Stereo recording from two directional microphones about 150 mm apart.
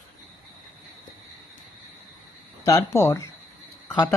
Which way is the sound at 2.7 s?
20° left (ahead or behind).